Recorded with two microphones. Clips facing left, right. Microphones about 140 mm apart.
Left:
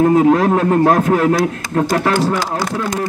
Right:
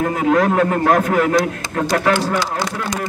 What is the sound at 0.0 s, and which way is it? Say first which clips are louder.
A man's voice: left 5 dB; 30° left (ahead or behind).